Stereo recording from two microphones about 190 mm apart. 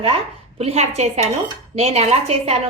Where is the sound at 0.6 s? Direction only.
35° right (ahead or behind).